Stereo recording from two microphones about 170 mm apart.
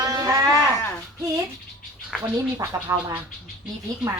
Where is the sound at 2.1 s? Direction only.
Centre (ahead or behind).